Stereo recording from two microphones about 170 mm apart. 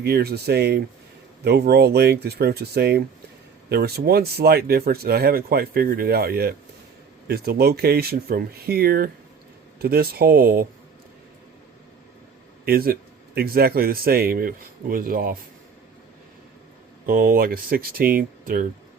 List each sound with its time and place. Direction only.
0.0 s speech: 70° right (ahead or behind)
12.6 s speech: 60° right (ahead or behind)
17.1 s speech: 55° right (ahead or behind)